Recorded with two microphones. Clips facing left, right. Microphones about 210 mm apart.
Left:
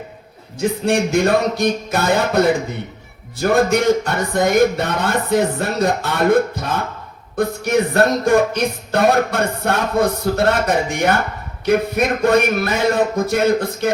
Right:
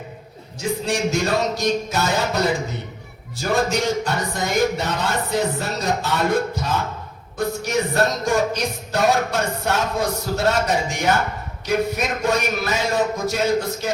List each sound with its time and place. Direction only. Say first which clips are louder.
0.6 s music: left 5 dB; 55° left (ahead or behind)